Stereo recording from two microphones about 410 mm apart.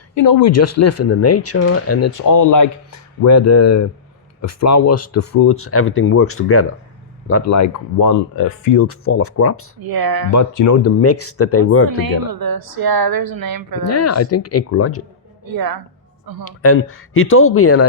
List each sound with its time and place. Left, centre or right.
0.1 s speech: left
9.8 s a woman's voice: right
10.3 s speech: left
12.0 s a woman's voice: right
13.8 s speech: left
15.5 s a woman's voice: right
16.4 s speech: left